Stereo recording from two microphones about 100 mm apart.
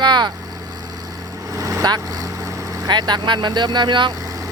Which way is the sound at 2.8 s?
45° right (ahead or behind).